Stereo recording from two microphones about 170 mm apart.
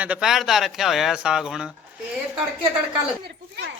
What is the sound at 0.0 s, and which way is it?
Speech, 5° right (ahead or behind).